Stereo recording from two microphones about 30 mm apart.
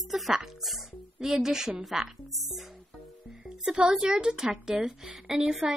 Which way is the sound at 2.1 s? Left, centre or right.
Centre.